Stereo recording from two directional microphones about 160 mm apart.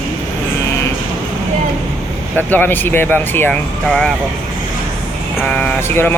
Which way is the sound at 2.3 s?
10° left (ahead or behind).